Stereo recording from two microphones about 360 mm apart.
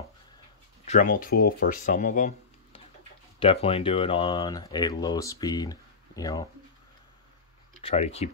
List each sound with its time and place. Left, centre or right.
0.8 s speech: left
7.8 s speech: centre